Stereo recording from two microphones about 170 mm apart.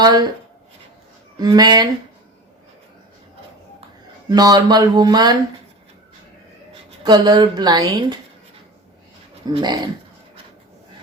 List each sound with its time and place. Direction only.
0.0 s speech: 25° right (ahead or behind)
1.4 s speech: 25° right (ahead or behind)
4.3 s speech: 25° right (ahead or behind)
7.0 s speech: 25° right (ahead or behind)
9.5 s speech: 25° right (ahead or behind)